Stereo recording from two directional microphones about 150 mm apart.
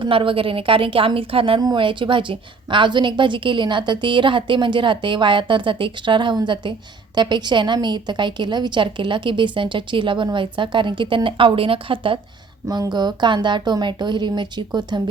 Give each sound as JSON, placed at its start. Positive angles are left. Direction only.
{"t": 0.0, "sound": "a woman's voice", "side_deg": -35}
{"t": 12.6, "sound": "a woman's voice", "side_deg": -25}